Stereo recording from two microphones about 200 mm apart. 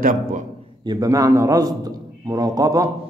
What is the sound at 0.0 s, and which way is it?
Speech, 45° right (ahead or behind).